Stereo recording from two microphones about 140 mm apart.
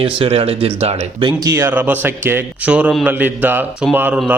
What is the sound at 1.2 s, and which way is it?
A man's voice, 30° right (ahead or behind).